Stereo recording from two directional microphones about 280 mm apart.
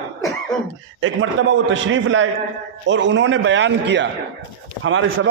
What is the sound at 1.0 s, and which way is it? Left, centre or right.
A man's voice, right.